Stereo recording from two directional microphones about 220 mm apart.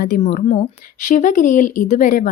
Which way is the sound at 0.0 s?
40° left (ahead or behind).